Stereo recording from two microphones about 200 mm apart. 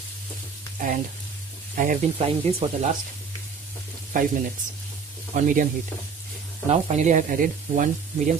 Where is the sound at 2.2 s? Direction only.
30° right (ahead or behind).